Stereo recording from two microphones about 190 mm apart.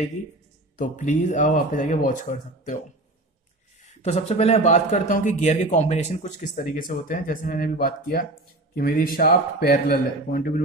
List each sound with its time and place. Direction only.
0.7 s speech: 40° left (ahead or behind)
4.0 s speech: 35° left (ahead or behind)